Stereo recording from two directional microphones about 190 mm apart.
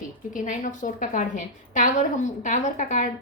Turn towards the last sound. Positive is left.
turn(degrees=40)  # may be behind; listen again after turning